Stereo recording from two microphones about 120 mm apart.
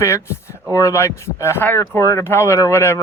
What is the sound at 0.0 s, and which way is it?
Speech, 20° left (ahead or behind).